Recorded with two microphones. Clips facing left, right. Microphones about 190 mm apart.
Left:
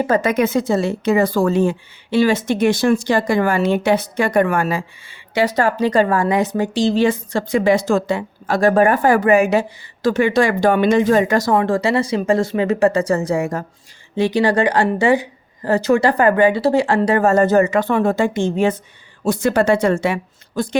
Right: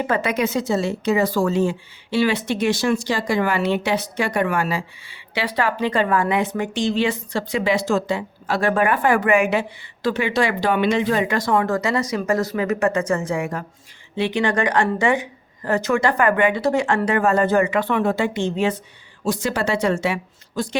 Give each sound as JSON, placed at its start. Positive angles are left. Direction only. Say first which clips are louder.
{"t": 0.0, "sound": "speech", "louder": "left 5 dB", "side_deg": 45}
{"t": 11.5, "sound": "a woman's voice", "louder": "left 2 dB", "side_deg": 30}